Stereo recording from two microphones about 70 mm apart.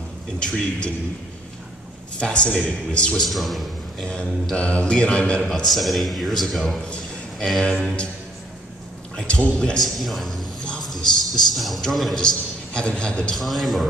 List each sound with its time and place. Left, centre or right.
0.4 s mantra: centre
2.1 s mantra: centre
3.2 s a man's voice: centre
4.1 s mantra: centre
5.7 s speech: centre
7.3 s mantra: centre
9.1 s mantra: centre
9.8 s speech: centre
10.8 s a sound: centre
11.5 s speech: centre
12.2 s a man's voice: centre
13.4 s speech: centre